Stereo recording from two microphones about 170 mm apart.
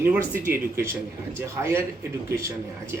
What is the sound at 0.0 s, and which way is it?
Speech, 10° right (ahead or behind).